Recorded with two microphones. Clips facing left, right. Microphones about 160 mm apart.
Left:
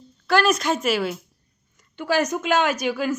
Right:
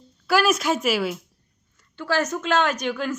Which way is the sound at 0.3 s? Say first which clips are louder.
Left 1 dB; 5° right (ahead or behind).